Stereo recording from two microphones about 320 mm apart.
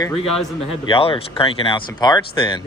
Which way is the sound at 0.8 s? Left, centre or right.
Centre.